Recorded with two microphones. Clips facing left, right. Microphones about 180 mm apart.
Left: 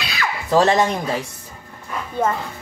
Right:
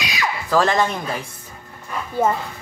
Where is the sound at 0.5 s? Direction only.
20° left (ahead or behind).